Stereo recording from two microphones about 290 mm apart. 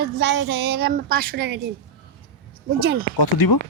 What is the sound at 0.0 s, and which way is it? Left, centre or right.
Speech, right.